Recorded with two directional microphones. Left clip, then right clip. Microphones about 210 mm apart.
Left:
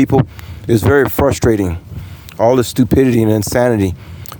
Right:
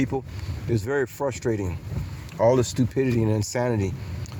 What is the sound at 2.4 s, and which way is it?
Speech, 55° left (ahead or behind).